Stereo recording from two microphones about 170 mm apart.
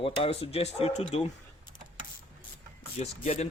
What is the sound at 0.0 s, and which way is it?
Speech, 35° left (ahead or behind).